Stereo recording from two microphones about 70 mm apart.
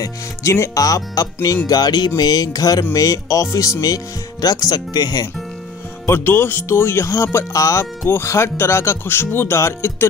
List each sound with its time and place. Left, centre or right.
0.0 s speech: left
1.7 s speech: left
6.0 s speech: left